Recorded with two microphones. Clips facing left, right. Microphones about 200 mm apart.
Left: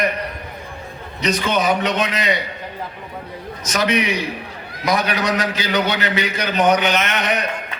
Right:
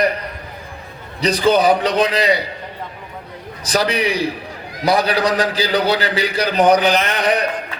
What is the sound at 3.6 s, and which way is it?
A man's voice, 35° right (ahead or behind).